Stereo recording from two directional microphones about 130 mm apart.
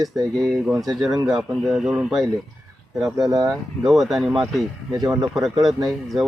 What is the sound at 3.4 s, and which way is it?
Speech, centre (ahead or behind).